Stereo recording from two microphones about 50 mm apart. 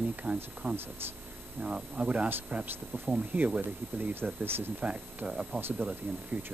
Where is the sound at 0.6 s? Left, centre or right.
Right.